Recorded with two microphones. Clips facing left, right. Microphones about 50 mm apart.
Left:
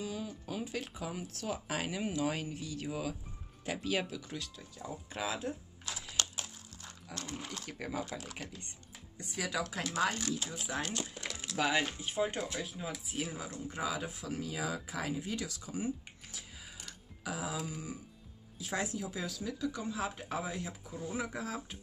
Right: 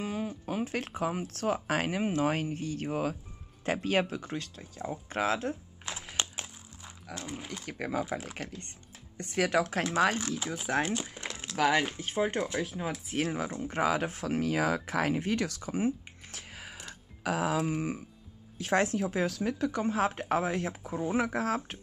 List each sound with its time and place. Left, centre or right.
0.0 s speech: right
5.1 s speech: right
5.9 s a sound: right
7.2 s speech: centre
7.7 s speech: right
8.1 s speech: right
8.4 s speech: right
10.8 s speech: right
11.1 s crumpling: right
11.5 s speech: right
12.2 s speech: right
12.6 s speech: right